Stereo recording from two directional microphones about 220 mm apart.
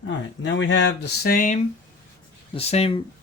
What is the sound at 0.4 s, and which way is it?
Speech, 55° left (ahead or behind).